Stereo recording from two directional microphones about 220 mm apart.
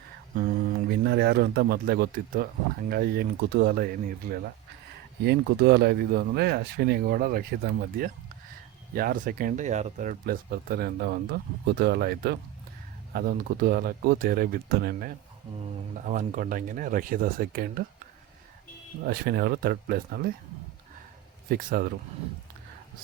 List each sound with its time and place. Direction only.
1.0 s speech: 45° right (ahead or behind)
19.0 s speech: 45° right (ahead or behind)
21.5 s speech: 40° right (ahead or behind)